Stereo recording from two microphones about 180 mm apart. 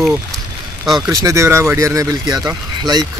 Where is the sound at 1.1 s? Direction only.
15° right (ahead or behind).